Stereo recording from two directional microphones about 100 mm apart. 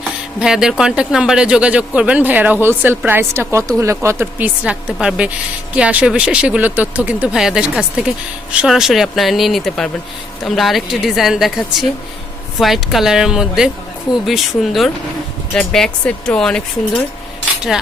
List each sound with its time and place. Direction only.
0.3 s speech: 5° right (ahead or behind)
7.3 s a woman's voice: 5° right (ahead or behind)